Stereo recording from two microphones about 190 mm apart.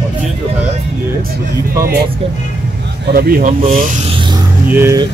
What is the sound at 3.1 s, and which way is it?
Speech, 50° right (ahead or behind).